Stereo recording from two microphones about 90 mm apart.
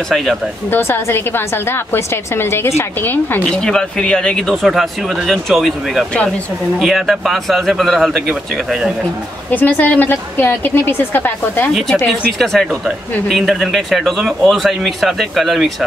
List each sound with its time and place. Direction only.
0.1 s a woman's voice: centre (ahead or behind)
0.7 s a woman's voice: 25° left (ahead or behind)
3.4 s speech: 10° left (ahead or behind)
4.6 s a woman's voice: 5° right (ahead or behind)
9.5 s a woman's voice: 20° left (ahead or behind)
11.7 s a woman's voice: centre (ahead or behind)